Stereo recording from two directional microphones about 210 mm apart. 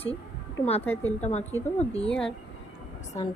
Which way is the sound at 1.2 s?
30° left (ahead or behind).